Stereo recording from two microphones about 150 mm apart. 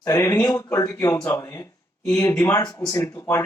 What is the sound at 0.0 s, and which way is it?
A man's voice, 20° left (ahead or behind).